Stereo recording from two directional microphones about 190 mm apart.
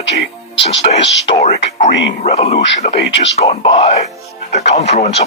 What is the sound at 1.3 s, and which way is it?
Speech, 35° left (ahead or behind).